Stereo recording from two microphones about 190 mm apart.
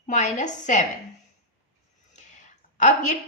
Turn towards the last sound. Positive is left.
turn(degrees=40)  # may be behind; listen again after turning